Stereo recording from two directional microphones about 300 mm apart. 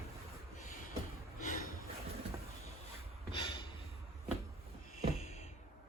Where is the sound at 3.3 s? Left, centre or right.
Centre.